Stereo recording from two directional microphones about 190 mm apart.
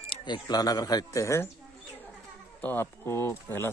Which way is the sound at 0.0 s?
25° left (ahead or behind).